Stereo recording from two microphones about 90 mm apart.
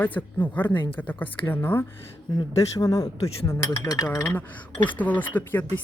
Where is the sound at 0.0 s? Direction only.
20° left (ahead or behind).